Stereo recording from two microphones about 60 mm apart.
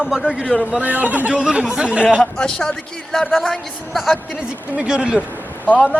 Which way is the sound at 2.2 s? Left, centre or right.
Centre.